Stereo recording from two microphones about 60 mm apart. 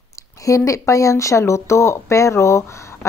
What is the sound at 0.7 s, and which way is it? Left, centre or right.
A woman's voice, left.